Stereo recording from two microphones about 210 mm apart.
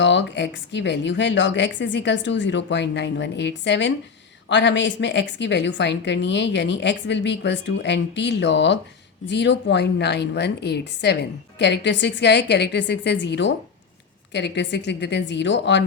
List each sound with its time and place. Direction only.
0.0 s a woman's voice: 60° left (ahead or behind)